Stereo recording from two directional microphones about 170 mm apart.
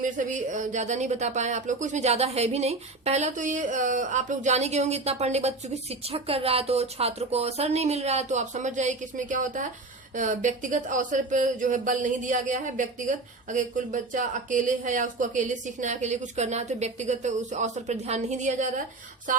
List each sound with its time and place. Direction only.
0.0 s speech: 45° right (ahead or behind)